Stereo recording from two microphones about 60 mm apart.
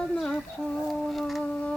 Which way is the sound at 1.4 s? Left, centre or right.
Left.